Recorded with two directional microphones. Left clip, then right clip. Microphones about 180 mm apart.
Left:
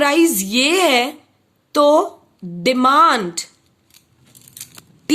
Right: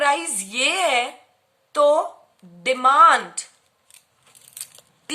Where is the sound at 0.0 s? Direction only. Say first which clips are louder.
Left 6 dB; 50° left (ahead or behind).